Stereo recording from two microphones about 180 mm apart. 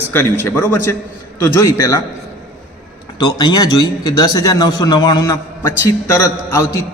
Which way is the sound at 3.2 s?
20° left (ahead or behind).